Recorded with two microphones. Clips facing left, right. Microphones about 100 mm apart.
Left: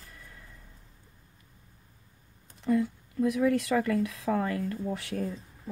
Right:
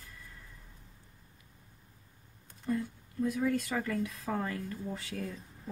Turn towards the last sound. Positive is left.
turn(degrees=70)  # may be behind; listen again after turning